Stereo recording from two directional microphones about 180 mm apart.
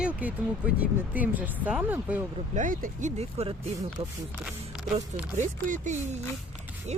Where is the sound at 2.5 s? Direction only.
45° right (ahead or behind).